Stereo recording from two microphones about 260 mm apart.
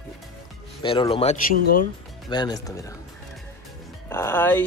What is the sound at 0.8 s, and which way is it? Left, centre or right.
Speech, left.